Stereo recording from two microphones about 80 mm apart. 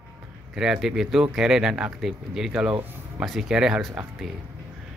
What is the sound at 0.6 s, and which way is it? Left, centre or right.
Speech, centre.